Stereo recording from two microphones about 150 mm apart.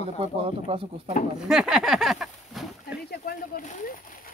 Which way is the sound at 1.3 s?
5° right (ahead or behind).